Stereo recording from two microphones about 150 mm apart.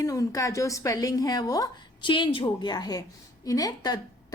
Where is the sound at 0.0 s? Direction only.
20° left (ahead or behind).